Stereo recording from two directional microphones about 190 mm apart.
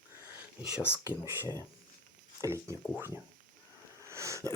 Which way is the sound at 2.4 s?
15° right (ahead or behind).